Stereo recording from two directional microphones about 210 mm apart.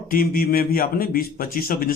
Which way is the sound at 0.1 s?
45° left (ahead or behind).